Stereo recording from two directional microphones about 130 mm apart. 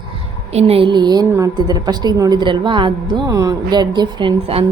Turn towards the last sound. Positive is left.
turn(degrees=-40)  # may be behind; listen again after turning